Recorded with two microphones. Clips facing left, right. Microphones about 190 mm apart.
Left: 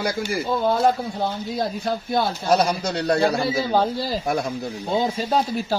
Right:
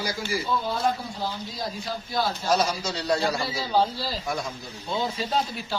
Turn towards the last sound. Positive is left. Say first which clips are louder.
# left 6 dB
turn(degrees=45)  # may be behind; listen again after turning